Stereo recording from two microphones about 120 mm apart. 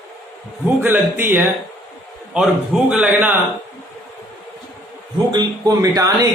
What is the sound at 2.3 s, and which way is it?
Speech, 5° right (ahead or behind).